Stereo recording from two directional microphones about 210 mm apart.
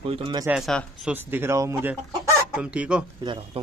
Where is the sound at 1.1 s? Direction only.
10° right (ahead or behind).